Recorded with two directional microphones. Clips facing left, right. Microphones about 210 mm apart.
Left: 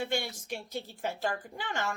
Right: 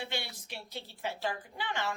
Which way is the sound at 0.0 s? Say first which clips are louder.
Left 6 dB; 45° left (ahead or behind).